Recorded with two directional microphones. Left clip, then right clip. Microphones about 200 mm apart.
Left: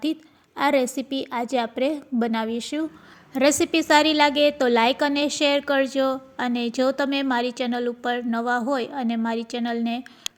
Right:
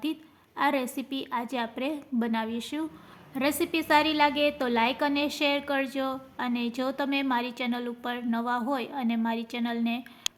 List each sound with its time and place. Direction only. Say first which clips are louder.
0.0 s a woman's voice: left 6 dB; 25° left (ahead or behind)